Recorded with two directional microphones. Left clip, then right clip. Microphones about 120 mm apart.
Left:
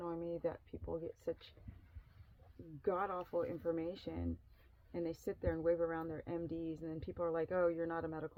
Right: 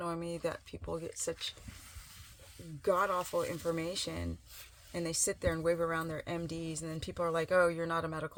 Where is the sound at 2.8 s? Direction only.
15° right (ahead or behind).